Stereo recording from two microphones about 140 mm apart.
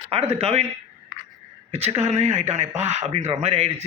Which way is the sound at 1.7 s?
50° right (ahead or behind).